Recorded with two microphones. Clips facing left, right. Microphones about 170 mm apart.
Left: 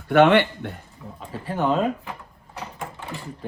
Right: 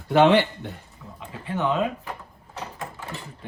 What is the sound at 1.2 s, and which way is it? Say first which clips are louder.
Speech: left 2 dB; 40° left (ahead or behind).